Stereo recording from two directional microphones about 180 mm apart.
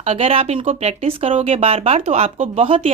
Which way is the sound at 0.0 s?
35° right (ahead or behind).